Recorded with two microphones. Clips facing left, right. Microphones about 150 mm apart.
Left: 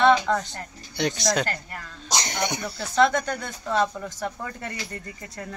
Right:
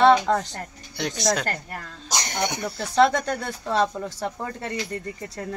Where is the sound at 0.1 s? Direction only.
35° right (ahead or behind).